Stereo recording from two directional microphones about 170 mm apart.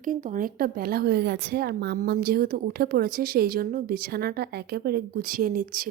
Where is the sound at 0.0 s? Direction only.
50° right (ahead or behind).